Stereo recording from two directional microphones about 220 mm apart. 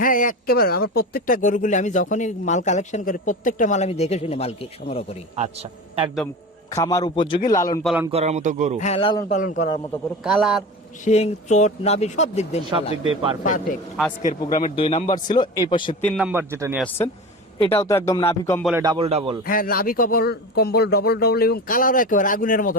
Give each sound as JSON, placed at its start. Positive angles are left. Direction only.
{"t": 0.0, "sound": "speech", "side_deg": 40}
{"t": 5.4, "sound": "a man's voice", "side_deg": -25}
{"t": 6.7, "sound": "speech", "side_deg": 15}
{"t": 8.1, "sound": "a man's voice", "side_deg": -30}
{"t": 8.8, "sound": "a man's voice", "side_deg": 25}
{"t": 9.3, "sound": "speech", "side_deg": 35}
{"t": 10.2, "sound": "a man's voice", "side_deg": -5}
{"t": 11.0, "sound": "a man's voice", "side_deg": 30}
{"t": 16.0, "sound": "a man's voice", "side_deg": -5}
{"t": 16.7, "sound": "speech", "side_deg": 5}
{"t": 18.8, "sound": "a man's voice", "side_deg": -20}
{"t": 19.5, "sound": "speech", "side_deg": 40}